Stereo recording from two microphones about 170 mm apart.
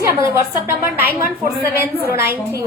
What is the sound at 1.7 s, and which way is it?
Speech, 15° right (ahead or behind).